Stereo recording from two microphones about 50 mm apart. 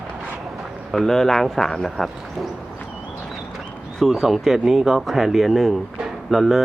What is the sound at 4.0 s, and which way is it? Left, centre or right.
Speech, centre.